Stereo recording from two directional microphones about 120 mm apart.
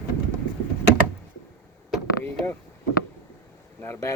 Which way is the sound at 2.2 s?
15° left (ahead or behind).